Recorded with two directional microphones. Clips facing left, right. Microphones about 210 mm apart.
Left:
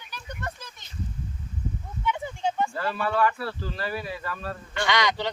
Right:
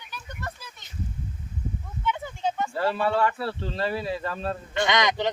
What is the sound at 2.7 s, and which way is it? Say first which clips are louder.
Speech: right 3 dB; 25° right (ahead or behind).